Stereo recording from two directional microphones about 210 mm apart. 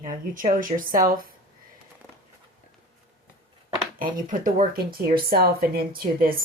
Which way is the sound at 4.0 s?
40° right (ahead or behind).